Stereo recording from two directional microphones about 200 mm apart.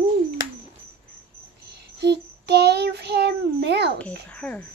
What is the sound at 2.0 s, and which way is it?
Child singing, 55° right (ahead or behind).